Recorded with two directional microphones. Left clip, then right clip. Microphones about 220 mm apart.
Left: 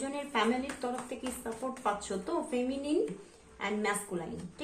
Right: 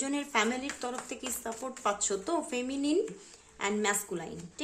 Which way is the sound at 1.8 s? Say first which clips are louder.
Right 2 dB; 50° right (ahead or behind).